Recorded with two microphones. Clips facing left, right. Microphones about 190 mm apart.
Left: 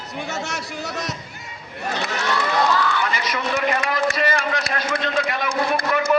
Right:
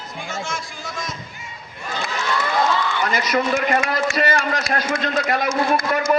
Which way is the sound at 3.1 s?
40° right (ahead or behind).